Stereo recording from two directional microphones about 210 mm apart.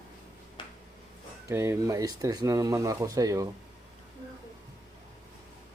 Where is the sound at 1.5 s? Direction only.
10° right (ahead or behind).